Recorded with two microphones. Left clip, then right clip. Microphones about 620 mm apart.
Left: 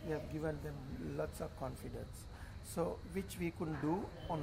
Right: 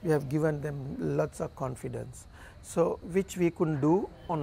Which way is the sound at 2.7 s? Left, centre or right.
Right.